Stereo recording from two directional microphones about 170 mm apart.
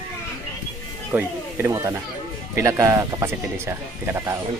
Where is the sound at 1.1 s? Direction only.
15° right (ahead or behind).